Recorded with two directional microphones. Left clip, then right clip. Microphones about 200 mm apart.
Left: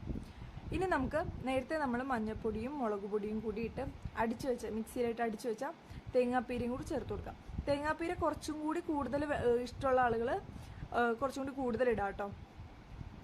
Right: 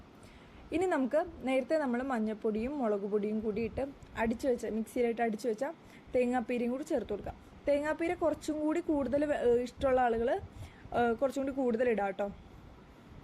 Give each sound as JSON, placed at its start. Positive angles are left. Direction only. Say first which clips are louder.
{"t": 0.7, "sound": "a woman's voice", "louder": "right 4 dB", "side_deg": -5}